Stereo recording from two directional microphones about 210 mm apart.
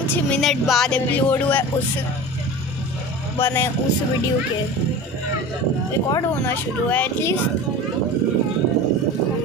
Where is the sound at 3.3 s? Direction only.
10° left (ahead or behind).